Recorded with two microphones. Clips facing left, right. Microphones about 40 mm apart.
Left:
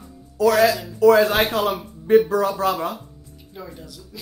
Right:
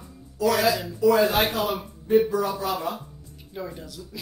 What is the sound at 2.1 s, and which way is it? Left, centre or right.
Speech, left.